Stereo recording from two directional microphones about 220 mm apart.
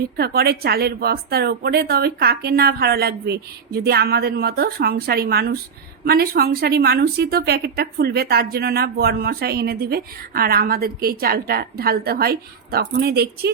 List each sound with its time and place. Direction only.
0.2 s speech: 45° right (ahead or behind)